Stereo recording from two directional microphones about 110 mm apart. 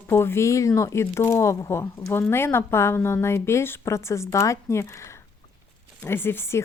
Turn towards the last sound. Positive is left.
turn(degrees=25)  # may be behind; listen again after turning